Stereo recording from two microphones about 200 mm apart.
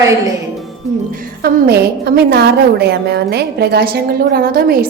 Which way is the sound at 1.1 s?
50° right (ahead or behind).